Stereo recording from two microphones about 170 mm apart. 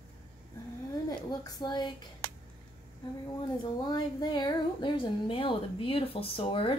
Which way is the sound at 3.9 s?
25° left (ahead or behind).